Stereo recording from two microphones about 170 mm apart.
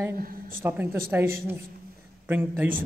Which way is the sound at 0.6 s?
10° right (ahead or behind).